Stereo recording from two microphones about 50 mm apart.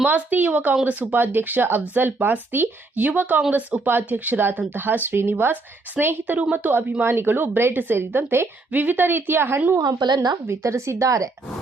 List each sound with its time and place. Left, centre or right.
0.1 s speech: right
6.4 s speech: right
6.7 s speech: right
8.7 s speech: right
9.7 s speech: right